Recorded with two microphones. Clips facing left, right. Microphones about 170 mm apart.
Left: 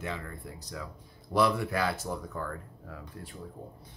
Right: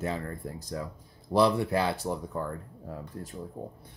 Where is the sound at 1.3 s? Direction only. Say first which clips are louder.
Right 3 dB; 30° right (ahead or behind).